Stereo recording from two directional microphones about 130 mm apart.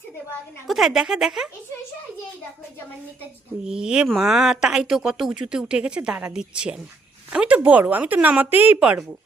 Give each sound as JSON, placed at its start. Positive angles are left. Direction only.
{"t": 0.7, "sound": "speech", "side_deg": -5}
{"t": 3.7, "sound": "speech", "side_deg": -5}